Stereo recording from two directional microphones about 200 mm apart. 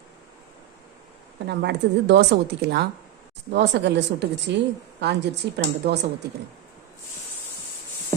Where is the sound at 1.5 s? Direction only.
55° right (ahead or behind).